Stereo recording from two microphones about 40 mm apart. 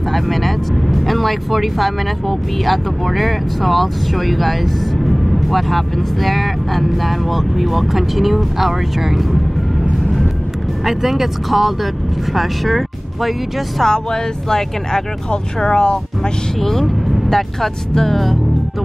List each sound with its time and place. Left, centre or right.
0.1 s speech: centre
10.9 s speech: centre
13.8 s speech: centre
16.5 s speech: centre